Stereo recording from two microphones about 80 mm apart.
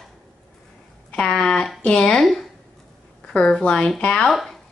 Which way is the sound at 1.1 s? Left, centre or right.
Centre.